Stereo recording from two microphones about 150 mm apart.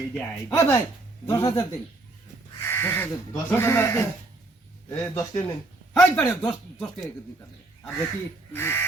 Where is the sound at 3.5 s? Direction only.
15° left (ahead or behind).